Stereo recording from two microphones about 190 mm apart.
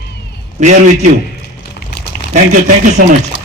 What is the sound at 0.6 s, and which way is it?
Speech, 40° right (ahead or behind).